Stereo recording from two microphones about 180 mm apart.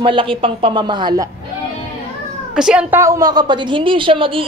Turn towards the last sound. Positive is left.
turn(degrees=-30)  # may be behind; listen again after turning